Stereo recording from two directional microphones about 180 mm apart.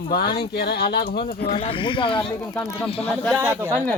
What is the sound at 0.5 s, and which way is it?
Speech, 60° left (ahead or behind).